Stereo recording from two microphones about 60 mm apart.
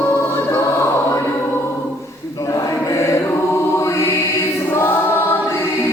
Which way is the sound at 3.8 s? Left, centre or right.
Left.